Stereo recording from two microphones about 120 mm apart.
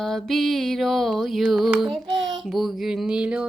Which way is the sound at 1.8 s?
Centre (ahead or behind).